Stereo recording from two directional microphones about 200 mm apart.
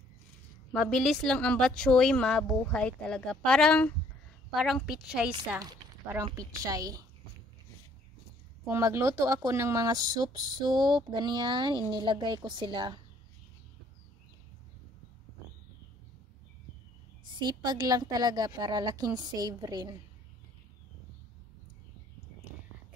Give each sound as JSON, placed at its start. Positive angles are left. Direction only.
{"t": 0.7, "sound": "speech", "side_deg": 0}
{"t": 5.6, "sound": "a woman's voice", "side_deg": -20}
{"t": 8.6, "sound": "speech", "side_deg": -15}
{"t": 17.2, "sound": "speech", "side_deg": -20}